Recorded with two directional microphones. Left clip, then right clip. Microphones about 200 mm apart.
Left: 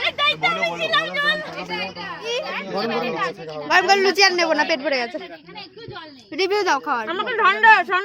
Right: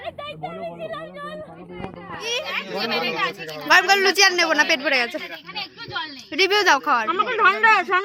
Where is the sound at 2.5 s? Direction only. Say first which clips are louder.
Even; 20° left (ahead or behind).